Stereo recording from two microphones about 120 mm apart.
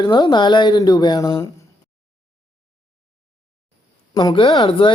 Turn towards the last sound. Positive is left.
turn(degrees=40)  # may be behind; listen again after turning